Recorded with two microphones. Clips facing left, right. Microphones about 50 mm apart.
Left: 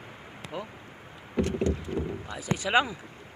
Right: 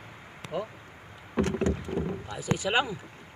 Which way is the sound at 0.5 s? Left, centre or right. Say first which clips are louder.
Right 4 dB; left.